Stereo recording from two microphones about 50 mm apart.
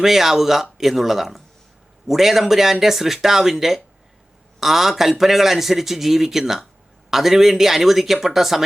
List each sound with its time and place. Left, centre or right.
0.0 s a man's voice: centre